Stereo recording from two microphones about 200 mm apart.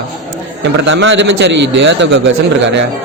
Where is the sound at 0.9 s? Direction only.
70° right (ahead or behind).